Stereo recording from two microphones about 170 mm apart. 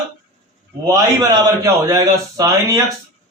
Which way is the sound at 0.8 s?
20° right (ahead or behind).